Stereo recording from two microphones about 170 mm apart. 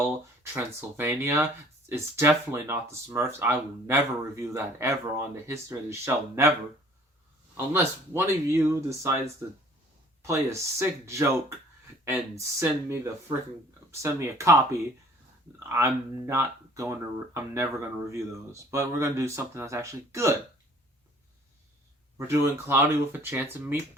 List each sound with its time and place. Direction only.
0.5 s speech: 10° right (ahead or behind)
7.5 s speech: 10° right (ahead or behind)
10.2 s speech: 15° right (ahead or behind)
22.3 s speech: 15° right (ahead or behind)